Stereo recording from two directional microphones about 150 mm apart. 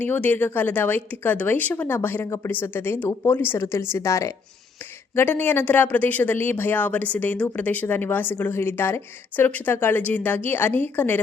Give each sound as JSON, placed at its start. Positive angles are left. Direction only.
{"t": 0.0, "sound": "speech", "side_deg": 10}